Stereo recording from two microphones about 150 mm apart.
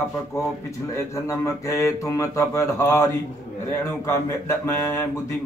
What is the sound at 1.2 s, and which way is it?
A man's voice, 20° left (ahead or behind).